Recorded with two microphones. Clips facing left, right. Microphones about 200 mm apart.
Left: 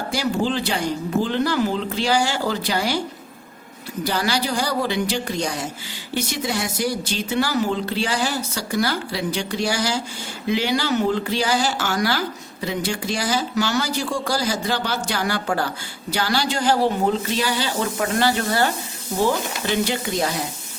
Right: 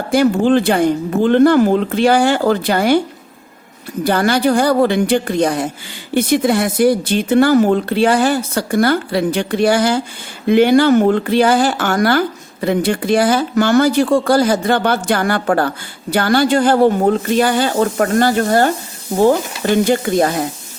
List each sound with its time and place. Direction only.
0.1 s speech: 55° right (ahead or behind)
4.0 s speech: 55° right (ahead or behind)